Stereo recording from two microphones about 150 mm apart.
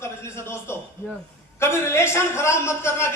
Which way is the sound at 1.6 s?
15° left (ahead or behind).